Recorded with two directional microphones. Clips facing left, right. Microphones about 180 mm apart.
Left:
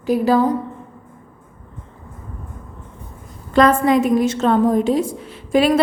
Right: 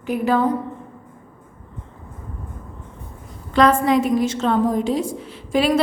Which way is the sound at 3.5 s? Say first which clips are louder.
Left 2 dB; 50° left (ahead or behind).